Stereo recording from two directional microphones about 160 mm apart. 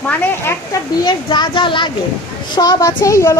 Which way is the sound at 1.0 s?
30° left (ahead or behind).